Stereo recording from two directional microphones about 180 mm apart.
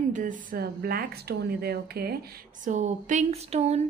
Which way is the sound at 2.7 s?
40° right (ahead or behind).